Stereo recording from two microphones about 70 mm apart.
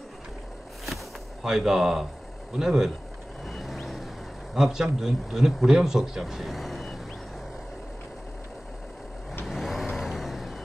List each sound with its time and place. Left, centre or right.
1.4 s speech: centre
3.4 s vehicle: centre
4.6 s a man's voice: centre
9.5 s vehicle: centre